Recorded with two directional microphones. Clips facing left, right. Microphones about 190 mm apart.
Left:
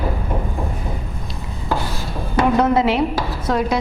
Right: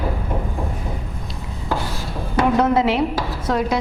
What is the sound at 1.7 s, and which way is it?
A woman's voice, 15° left (ahead or behind).